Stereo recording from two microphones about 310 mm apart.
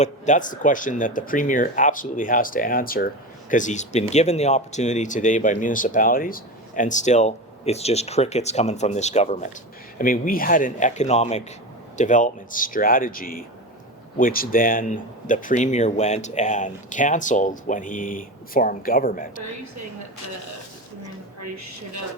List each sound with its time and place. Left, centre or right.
0.0 s speech: left
21.4 s a woman's voice: right